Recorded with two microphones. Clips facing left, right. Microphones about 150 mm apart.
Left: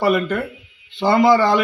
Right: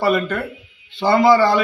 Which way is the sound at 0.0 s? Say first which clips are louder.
Left 1 dB; 20° left (ahead or behind).